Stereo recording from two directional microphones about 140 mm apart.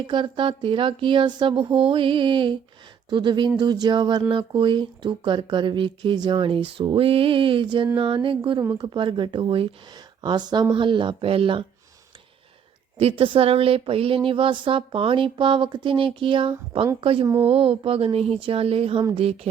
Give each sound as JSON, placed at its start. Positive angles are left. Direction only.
{"t": 0.0, "sound": "speech", "side_deg": -35}
{"t": 13.0, "sound": "speech", "side_deg": -45}
{"t": 17.4, "sound": "a sound", "side_deg": -45}